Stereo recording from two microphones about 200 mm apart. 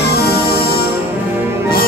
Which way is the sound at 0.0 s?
50° left (ahead or behind).